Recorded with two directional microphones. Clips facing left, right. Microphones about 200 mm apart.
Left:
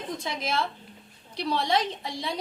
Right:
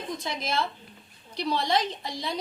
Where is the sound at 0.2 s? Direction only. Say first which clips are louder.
Left 1 dB; 5° left (ahead or behind).